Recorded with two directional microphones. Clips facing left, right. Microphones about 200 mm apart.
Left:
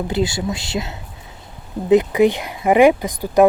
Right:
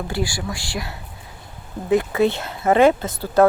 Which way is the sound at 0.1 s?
20° left (ahead or behind).